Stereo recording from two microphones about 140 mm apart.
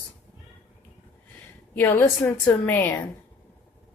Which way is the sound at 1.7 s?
15° left (ahead or behind).